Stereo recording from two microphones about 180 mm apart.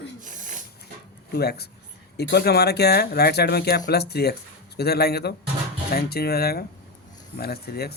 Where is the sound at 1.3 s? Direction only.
60° left (ahead or behind).